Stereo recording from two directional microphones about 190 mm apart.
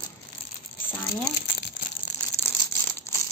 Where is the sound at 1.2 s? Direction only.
60° left (ahead or behind).